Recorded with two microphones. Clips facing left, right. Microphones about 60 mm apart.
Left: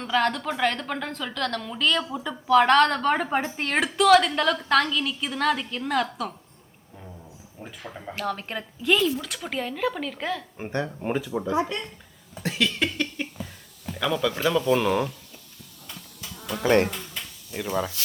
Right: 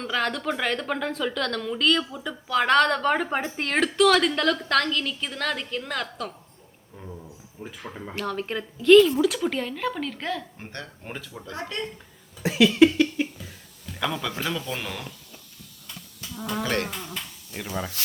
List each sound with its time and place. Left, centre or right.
0.0 s a woman's voice: centre
7.6 s a woman's voice: centre
10.6 s speech: left
12.4 s a sound: centre
13.9 s a woman's voice: centre
16.6 s speech: left